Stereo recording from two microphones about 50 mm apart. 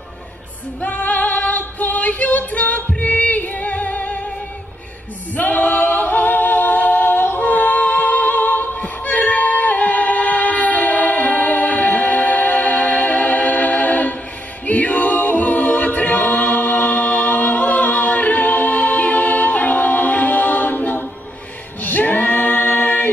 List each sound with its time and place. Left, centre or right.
0.7 s female singing: left
3.0 s music: left
5.3 s a capella: left